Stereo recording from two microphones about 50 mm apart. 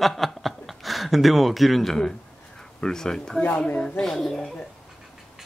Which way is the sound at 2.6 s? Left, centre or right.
Centre.